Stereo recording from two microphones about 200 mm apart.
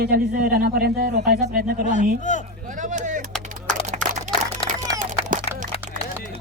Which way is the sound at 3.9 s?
35° right (ahead or behind).